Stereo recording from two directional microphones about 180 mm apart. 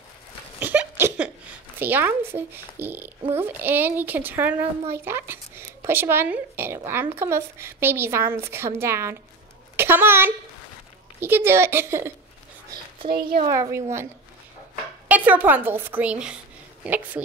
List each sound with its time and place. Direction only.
0.6 s a sound: 10° right (ahead or behind)
1.8 s a child's voice: 10° right (ahead or behind)
13.5 s a child's voice: 15° right (ahead or behind)
15.0 s a child's voice: 10° right (ahead or behind)